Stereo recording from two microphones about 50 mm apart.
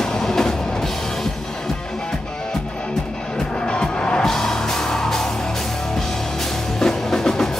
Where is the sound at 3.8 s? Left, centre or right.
Centre.